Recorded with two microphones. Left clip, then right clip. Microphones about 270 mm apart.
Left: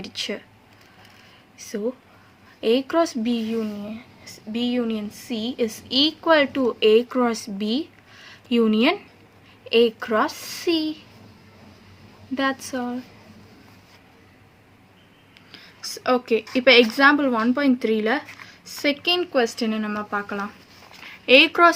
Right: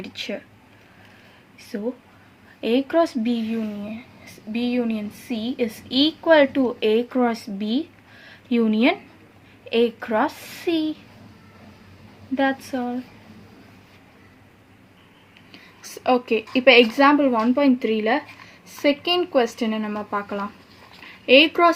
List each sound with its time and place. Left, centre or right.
0.0 s a woman's voice: left
2.6 s a woman's voice: left
12.3 s a woman's voice: left
15.8 s a woman's voice: left
17.8 s speech: left
18.8 s a woman's voice: left